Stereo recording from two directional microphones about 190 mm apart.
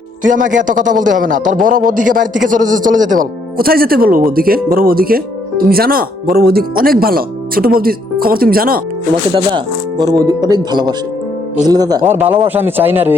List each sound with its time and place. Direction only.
0.2 s speech: 45° right (ahead or behind)
9.3 s a man's voice: 25° right (ahead or behind); by 13.1 s 10° right (ahead or behind)